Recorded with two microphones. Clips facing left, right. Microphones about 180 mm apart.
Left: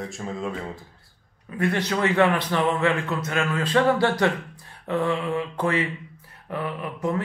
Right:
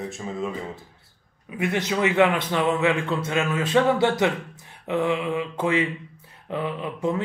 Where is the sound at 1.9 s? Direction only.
5° right (ahead or behind); by 7.2 s 20° right (ahead or behind).